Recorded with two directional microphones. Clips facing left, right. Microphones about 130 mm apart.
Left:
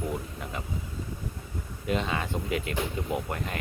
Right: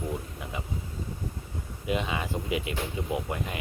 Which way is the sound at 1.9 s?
15° right (ahead or behind).